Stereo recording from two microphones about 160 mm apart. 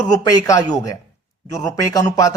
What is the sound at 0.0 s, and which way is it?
Speech, 20° left (ahead or behind).